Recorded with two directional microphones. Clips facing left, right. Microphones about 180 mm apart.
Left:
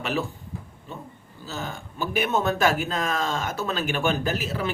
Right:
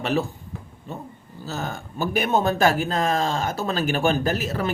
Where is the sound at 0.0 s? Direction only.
40° right (ahead or behind).